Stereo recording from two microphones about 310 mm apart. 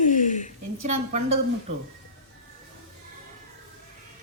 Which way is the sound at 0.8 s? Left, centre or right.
Right.